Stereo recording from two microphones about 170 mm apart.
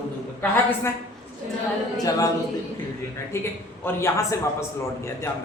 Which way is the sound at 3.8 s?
15° left (ahead or behind).